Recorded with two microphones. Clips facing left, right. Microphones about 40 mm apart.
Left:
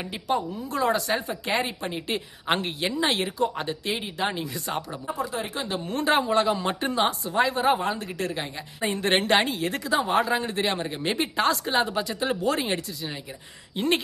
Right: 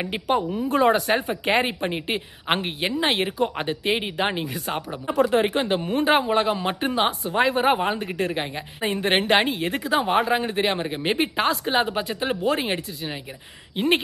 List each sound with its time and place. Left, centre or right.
0.1 s a woman's voice: right
5.2 s a woman's voice: right